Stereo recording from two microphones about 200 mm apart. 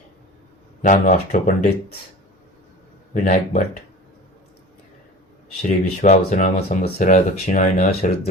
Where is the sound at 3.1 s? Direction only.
40° left (ahead or behind).